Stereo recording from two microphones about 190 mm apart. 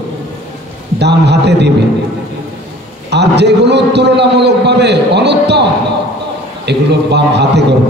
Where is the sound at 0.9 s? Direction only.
60° right (ahead or behind).